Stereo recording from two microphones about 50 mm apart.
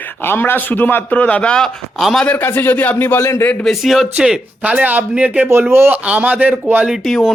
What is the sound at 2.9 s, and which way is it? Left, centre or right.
Speech, left.